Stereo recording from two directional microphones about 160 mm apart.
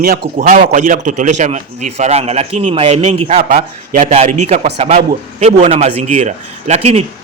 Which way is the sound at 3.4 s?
60° right (ahead or behind).